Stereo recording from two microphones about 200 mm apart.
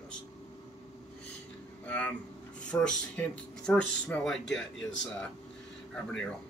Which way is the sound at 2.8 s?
5° left (ahead or behind).